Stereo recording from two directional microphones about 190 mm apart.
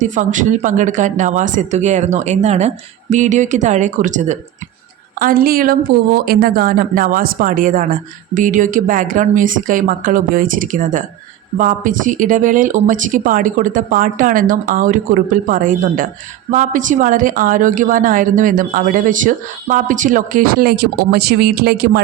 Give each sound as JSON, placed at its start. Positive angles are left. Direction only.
{"t": 0.0, "sound": "a woman's voice", "side_deg": -40}